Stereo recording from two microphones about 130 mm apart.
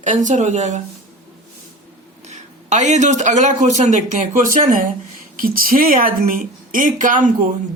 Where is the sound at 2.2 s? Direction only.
65° right (ahead or behind); by 7.3 s 85° right.